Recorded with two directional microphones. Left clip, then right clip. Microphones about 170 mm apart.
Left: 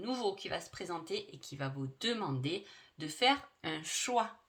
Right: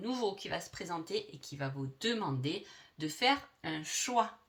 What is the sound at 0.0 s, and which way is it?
Speech, 35° left (ahead or behind).